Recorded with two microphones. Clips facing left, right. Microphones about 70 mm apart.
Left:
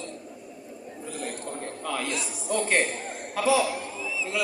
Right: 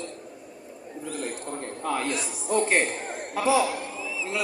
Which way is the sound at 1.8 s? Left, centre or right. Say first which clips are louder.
Right 3 dB; right.